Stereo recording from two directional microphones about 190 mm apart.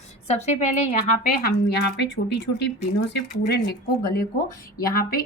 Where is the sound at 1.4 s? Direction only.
60° left (ahead or behind).